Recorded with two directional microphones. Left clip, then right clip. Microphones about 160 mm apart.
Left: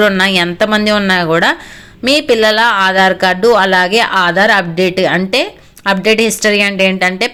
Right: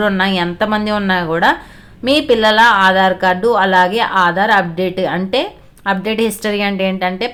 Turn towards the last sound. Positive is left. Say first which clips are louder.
# left 6 dB
turn(degrees=20)  # may be behind; listen again after turning